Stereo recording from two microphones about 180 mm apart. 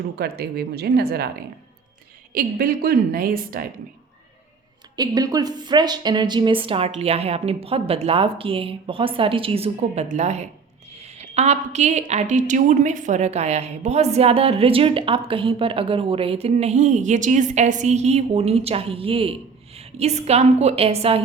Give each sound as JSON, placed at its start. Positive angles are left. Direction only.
{"t": 0.2, "sound": "speech", "side_deg": -60}
{"t": 2.3, "sound": "a woman's voice", "side_deg": -55}
{"t": 4.9, "sound": "a woman's voice", "side_deg": -20}